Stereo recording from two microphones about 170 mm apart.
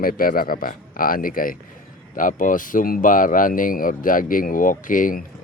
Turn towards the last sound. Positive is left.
turn(degrees=55)  # may be behind; listen again after turning